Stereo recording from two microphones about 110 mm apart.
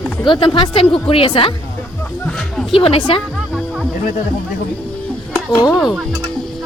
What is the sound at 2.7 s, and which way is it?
Speech, 55° left (ahead or behind).